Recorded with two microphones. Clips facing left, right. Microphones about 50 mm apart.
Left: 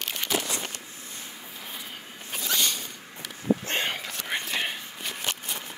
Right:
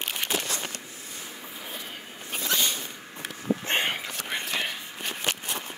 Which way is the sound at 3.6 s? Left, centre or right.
Right.